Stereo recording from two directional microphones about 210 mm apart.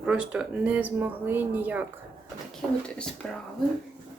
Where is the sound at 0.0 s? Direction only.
5° right (ahead or behind).